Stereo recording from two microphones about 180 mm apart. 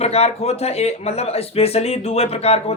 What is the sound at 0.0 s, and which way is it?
Speech, 35° left (ahead or behind).